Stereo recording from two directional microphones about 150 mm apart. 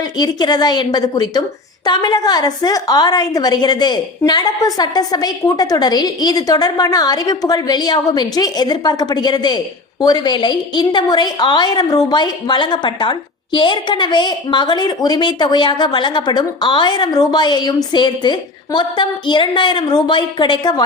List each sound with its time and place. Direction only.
0.2 s a woman's voice: 25° left (ahead or behind)